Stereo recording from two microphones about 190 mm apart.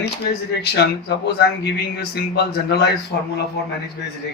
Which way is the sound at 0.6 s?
60° left (ahead or behind).